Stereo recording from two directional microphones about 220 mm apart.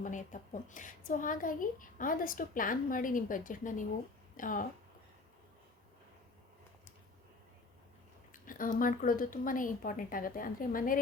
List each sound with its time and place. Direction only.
0.0 s a woman's voice: 35° left (ahead or behind)
8.3 s a woman's voice: 40° left (ahead or behind)